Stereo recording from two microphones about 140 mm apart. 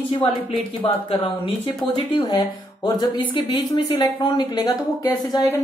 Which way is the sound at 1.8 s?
5° left (ahead or behind).